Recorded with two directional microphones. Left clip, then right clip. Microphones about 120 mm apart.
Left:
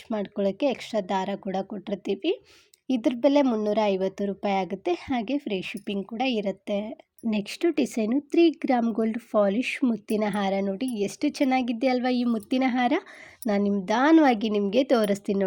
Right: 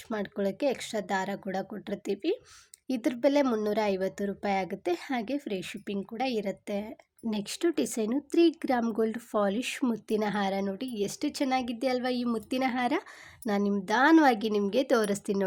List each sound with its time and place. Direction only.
0.1 s a woman's voice: 20° left (ahead or behind)